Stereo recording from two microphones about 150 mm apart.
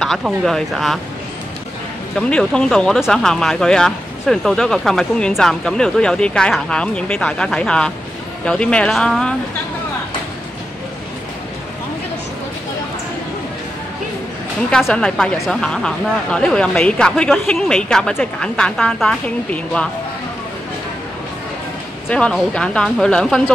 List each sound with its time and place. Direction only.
0.0 s speech: centre (ahead or behind)
2.1 s speech: 5° left (ahead or behind)
14.7 s speech: 5° left (ahead or behind)
22.1 s speech: 5° left (ahead or behind)